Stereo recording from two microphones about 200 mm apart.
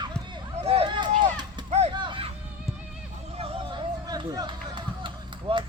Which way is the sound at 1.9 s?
25° right (ahead or behind).